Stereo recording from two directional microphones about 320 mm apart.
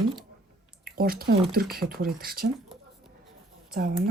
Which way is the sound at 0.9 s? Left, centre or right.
Right.